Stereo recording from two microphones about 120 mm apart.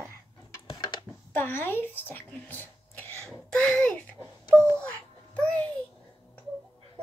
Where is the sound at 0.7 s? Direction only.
40° left (ahead or behind).